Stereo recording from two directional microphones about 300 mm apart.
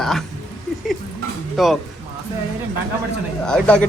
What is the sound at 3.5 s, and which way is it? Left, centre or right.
Speech, centre.